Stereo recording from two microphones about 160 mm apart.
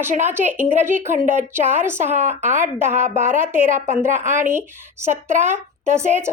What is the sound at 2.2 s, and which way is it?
Speech, 50° right (ahead or behind).